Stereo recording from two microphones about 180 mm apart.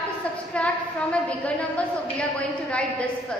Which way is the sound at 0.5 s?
5° left (ahead or behind).